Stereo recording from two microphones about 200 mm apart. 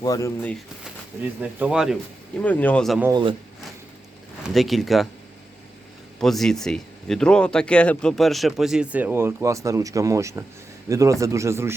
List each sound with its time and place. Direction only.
0.0 s speech: 15° left (ahead or behind)
1.4 s speech: 5° right (ahead or behind)
2.4 s speech: 5° left (ahead or behind)
3.0 s speech: 20° right (ahead or behind)
4.4 s speech: centre (ahead or behind)
6.1 s a man's voice: centre (ahead or behind); by 11.7 s 15° right (ahead or behind)